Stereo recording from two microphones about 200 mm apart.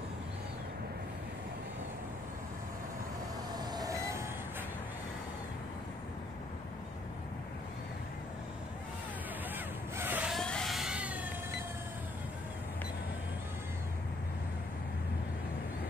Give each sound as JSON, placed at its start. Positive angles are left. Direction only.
{"t": 3.5, "sound": "vehicle", "side_deg": -20}
{"t": 9.9, "sound": "cat", "side_deg": -10}